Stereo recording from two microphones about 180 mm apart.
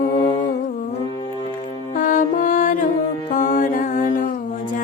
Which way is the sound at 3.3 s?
45° left (ahead or behind).